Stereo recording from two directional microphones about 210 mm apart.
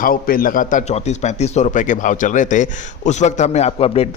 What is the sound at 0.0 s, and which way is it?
A man's voice, 45° left (ahead or behind).